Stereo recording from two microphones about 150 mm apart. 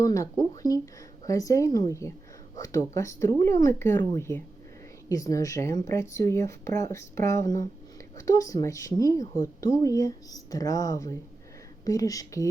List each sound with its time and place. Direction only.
0.0 s a woman's voice: 20° left (ahead or behind)